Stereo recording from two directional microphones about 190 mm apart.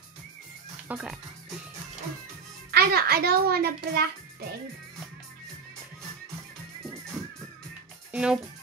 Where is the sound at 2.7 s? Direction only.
55° right (ahead or behind).